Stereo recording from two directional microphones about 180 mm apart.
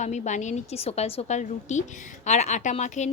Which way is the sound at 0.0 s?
40° left (ahead or behind).